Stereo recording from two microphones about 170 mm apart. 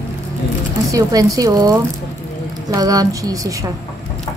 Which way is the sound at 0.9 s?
20° right (ahead or behind).